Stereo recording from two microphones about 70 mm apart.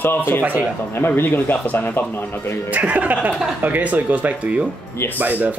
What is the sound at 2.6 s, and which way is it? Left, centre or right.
A man's voice, right.